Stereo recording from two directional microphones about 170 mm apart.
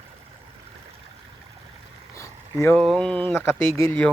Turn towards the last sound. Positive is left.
turn(degrees=10)  # may be behind; listen again after turning